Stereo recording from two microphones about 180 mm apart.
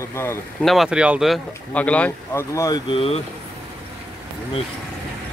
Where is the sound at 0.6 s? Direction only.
Centre (ahead or behind); by 2.8 s 15° left (ahead or behind).